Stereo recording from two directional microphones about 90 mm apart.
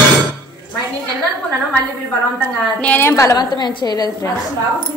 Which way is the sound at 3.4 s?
55° left (ahead or behind).